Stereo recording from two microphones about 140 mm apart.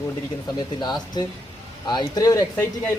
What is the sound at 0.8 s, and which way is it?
Speech, 30° left (ahead or behind).